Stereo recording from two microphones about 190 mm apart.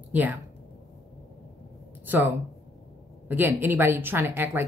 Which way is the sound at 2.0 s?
10° right (ahead or behind).